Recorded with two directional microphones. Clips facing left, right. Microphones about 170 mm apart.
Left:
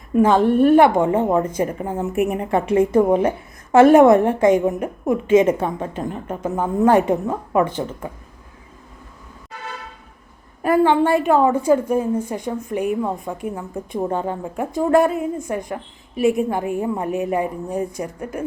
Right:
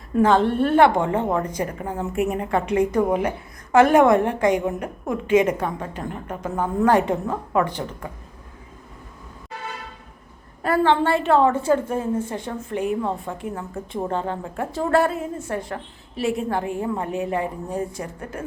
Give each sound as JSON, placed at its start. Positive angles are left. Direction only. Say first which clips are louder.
{"t": 0.1, "sound": "a woman's voice", "louder": "left 3 dB", "side_deg": 15}
{"t": 10.6, "sound": "a woman's voice", "louder": "left 3 dB", "side_deg": 15}